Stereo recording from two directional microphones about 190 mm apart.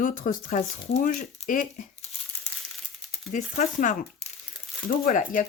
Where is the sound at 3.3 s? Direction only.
40° left (ahead or behind).